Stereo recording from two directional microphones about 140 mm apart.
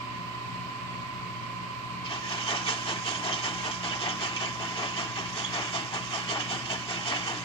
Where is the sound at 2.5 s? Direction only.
40° left (ahead or behind).